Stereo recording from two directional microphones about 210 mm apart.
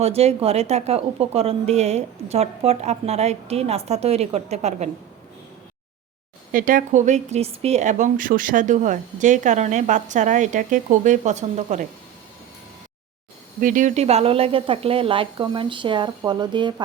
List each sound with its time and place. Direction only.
0.0 s speech: 30° right (ahead or behind)
6.5 s a woman's voice: 40° right (ahead or behind)
13.6 s speech: 40° right (ahead or behind); by 16.8 s 20° right (ahead or behind)